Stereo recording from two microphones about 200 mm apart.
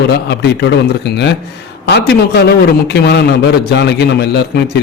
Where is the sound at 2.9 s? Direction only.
55° left (ahead or behind).